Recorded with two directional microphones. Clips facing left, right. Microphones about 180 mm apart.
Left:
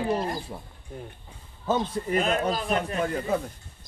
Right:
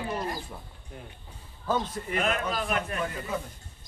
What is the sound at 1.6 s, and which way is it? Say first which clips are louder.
A man's voice: left 3 dB; 25° left (ahead or behind).